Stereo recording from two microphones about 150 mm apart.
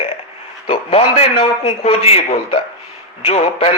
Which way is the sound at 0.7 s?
40° left (ahead or behind).